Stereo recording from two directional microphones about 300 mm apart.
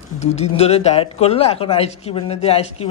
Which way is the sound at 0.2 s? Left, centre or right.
Left.